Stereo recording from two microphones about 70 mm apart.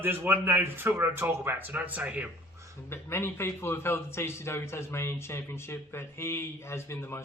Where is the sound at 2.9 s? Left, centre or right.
Left.